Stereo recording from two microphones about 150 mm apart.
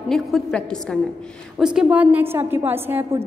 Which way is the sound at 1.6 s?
5° right (ahead or behind).